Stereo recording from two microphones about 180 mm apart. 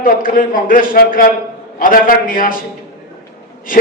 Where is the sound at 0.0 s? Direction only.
50° left (ahead or behind).